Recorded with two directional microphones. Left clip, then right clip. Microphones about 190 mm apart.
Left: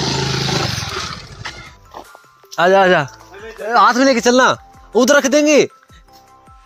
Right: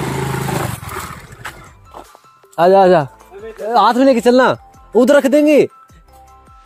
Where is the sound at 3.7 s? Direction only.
25° right (ahead or behind).